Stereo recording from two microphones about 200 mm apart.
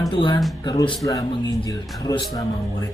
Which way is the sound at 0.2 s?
20° left (ahead or behind).